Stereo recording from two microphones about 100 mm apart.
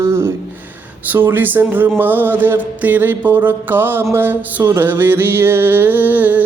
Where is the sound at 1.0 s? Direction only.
20° right (ahead or behind).